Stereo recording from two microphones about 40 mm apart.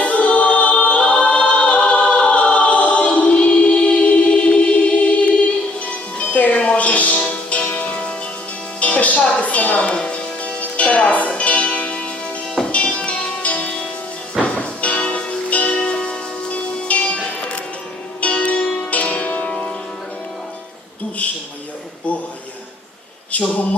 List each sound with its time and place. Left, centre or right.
0.0 s choir: left
5.8 s music: left
9.9 s music: left
15.8 s music: left
18.2 s music: left
23.3 s a sound: left